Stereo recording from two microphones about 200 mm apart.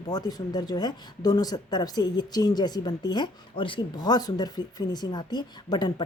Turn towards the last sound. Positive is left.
turn(degrees=20)  # may be behind; listen again after turning